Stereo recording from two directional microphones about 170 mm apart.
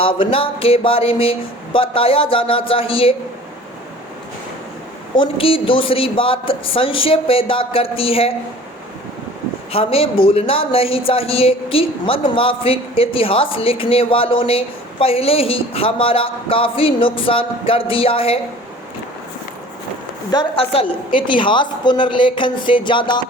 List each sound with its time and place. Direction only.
0.0 s a woman's voice: 30° left (ahead or behind)
5.1 s a woman's voice: 30° left (ahead or behind)
9.7 s a woman's voice: 35° left (ahead or behind)
20.3 s a woman's voice: 30° left (ahead or behind)